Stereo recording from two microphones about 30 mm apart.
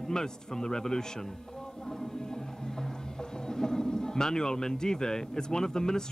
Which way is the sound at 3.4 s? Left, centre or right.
Left.